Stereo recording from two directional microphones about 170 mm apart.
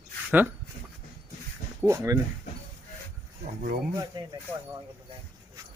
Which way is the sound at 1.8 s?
15° right (ahead or behind).